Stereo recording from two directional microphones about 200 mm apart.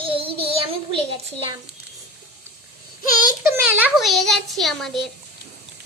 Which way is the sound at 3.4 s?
10° right (ahead or behind).